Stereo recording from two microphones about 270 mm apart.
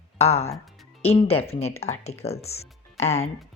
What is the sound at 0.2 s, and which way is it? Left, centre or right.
Speech, left.